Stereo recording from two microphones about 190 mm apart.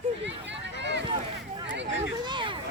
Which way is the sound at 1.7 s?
75° right (ahead or behind).